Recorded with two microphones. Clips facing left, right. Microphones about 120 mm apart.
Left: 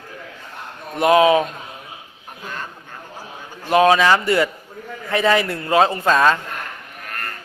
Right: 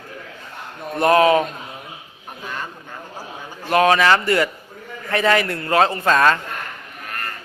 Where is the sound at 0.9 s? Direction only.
15° left (ahead or behind).